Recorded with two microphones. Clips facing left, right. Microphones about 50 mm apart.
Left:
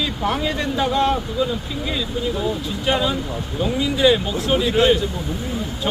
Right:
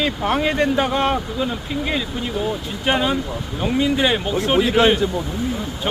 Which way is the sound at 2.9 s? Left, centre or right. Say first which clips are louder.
Right 2 dB; right.